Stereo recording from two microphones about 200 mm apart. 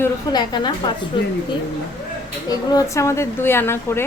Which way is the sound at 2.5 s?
15° left (ahead or behind).